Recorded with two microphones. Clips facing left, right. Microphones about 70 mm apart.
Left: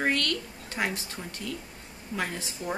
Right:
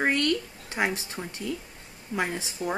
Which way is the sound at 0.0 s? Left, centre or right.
Centre.